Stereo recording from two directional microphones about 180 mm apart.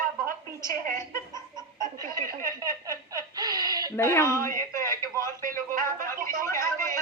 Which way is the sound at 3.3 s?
20° right (ahead or behind).